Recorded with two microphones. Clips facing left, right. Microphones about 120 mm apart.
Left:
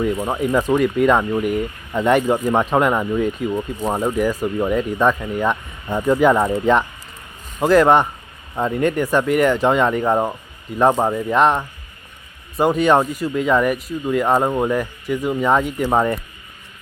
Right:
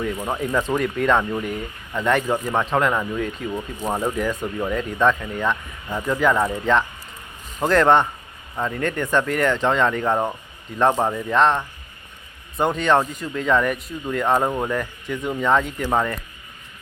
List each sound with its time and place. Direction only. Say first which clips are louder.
0.0 s speech: left 5 dB; 10° left (ahead or behind)
8.5 s speech: left 5 dB; 20° left (ahead or behind)